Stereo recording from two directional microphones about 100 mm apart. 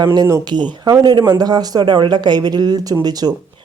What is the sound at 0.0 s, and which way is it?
Speech, 45° right (ahead or behind).